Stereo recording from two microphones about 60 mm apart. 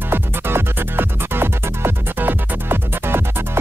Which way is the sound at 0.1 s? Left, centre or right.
Right.